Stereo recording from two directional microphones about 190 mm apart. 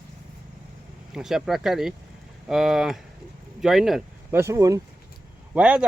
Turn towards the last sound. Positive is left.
turn(degrees=-5)  # may be behind; listen again after turning